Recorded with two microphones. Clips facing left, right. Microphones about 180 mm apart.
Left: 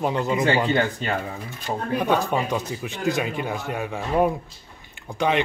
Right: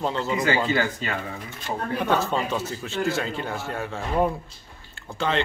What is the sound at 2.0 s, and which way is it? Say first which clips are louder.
Speech: left 2 dB; 15° left (ahead or behind).